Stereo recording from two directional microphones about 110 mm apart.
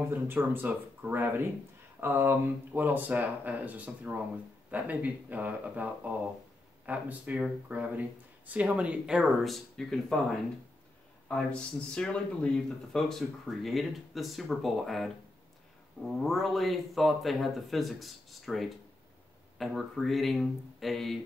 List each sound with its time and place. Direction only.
0.1 s speech: 20° right (ahead or behind); by 10.1 s 5° left (ahead or behind)
11.3 s speech: 10° left (ahead or behind)